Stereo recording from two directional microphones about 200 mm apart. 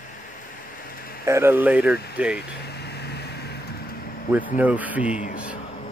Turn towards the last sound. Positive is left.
turn(degrees=-5)  # may be behind; listen again after turning